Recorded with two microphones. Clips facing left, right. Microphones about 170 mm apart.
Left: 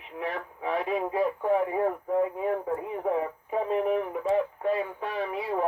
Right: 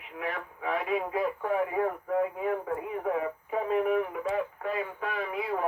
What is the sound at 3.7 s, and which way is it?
Speech, 30° left (ahead or behind).